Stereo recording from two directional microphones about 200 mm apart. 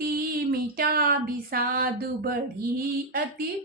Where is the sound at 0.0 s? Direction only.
45° right (ahead or behind).